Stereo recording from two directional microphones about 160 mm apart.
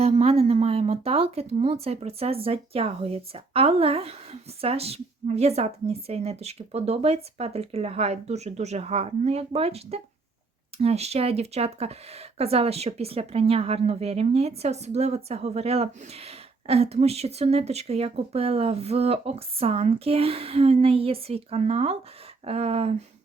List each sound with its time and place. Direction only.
0.0 s speech: 40° right (ahead or behind)